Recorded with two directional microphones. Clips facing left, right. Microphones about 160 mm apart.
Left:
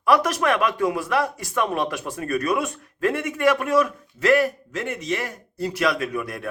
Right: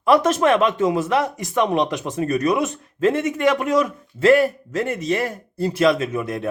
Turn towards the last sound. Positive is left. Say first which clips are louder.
# right 4 dB
turn(degrees=-20)  # may be behind; listen again after turning